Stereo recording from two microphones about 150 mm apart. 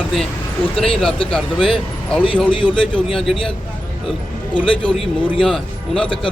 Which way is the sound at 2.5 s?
35° left (ahead or behind).